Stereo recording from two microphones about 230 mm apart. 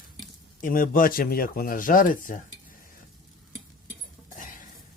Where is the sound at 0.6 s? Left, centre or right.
Left.